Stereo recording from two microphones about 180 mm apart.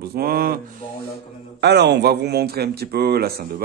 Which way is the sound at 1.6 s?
70° right (ahead or behind).